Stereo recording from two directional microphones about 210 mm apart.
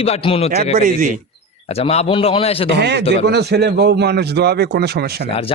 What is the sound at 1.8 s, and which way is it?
Speech, 30° left (ahead or behind).